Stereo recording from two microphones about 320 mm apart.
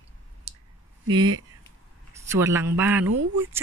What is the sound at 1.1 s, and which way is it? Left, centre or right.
A man's voice, centre.